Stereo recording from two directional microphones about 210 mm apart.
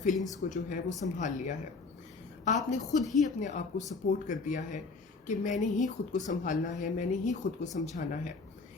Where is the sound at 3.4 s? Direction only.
35° left (ahead or behind).